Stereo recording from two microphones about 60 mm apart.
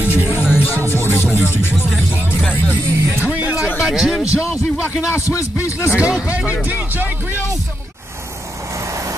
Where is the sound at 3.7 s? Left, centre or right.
Centre.